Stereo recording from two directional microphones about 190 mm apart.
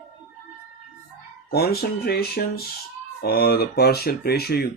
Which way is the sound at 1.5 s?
55° left (ahead or behind).